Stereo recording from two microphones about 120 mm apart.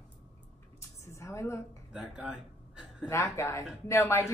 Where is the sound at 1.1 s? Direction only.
25° left (ahead or behind).